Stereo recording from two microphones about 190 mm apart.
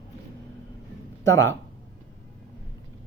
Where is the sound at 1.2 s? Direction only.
15° left (ahead or behind).